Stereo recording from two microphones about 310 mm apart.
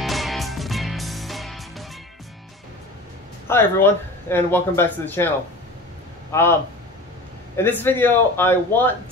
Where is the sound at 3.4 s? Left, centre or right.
Centre.